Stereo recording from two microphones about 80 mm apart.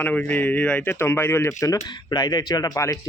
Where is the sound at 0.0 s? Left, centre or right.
Centre.